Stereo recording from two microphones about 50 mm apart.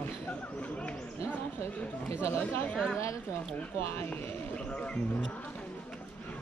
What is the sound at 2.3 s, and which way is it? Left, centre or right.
Speech, left.